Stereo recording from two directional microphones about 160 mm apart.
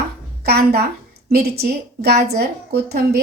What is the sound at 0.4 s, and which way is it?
A woman's voice, 80° right.